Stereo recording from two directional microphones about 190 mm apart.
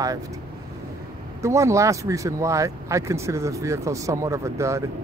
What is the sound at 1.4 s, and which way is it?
Speech, 15° right (ahead or behind).